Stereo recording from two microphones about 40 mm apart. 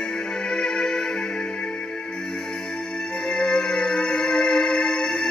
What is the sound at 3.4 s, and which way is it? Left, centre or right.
Music, centre.